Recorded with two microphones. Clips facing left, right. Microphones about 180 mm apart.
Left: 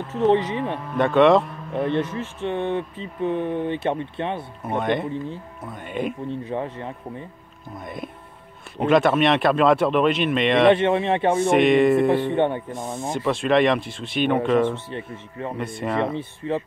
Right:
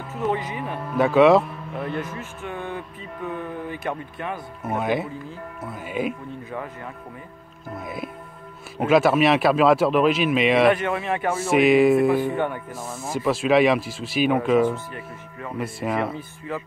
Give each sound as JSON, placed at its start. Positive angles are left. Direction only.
{"t": 0.2, "sound": "speech", "side_deg": 30}
{"t": 0.9, "sound": "speech", "side_deg": -5}
{"t": 2.1, "sound": "speech", "side_deg": 30}
{"t": 4.6, "sound": "speech", "side_deg": -5}
{"t": 6.5, "sound": "speech", "side_deg": 30}
{"t": 7.8, "sound": "speech", "side_deg": -5}
{"t": 10.7, "sound": "speech", "side_deg": 30}
{"t": 11.3, "sound": "speech", "side_deg": -5}
{"t": 12.4, "sound": "speech", "side_deg": 30}
{"t": 12.7, "sound": "speech", "side_deg": -5}
{"t": 14.9, "sound": "speech", "side_deg": 30}
{"t": 15.6, "sound": "speech", "side_deg": -5}
{"t": 16.2, "sound": "speech", "side_deg": 30}